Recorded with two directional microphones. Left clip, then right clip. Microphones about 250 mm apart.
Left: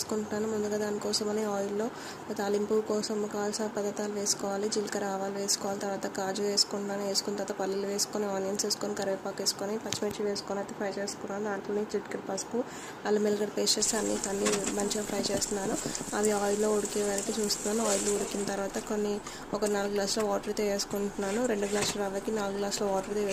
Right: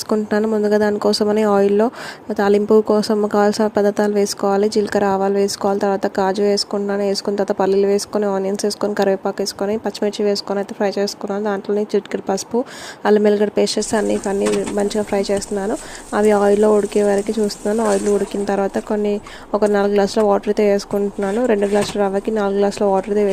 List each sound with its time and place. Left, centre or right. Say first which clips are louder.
0.1 s speech: right 16 dB; right
18.4 s speech: right 14 dB; right